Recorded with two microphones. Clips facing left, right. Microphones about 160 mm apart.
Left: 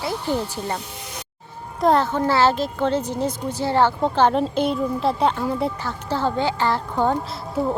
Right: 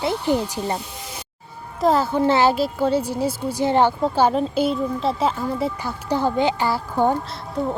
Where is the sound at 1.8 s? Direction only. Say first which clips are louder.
Right 1 dB; 5° right (ahead or behind).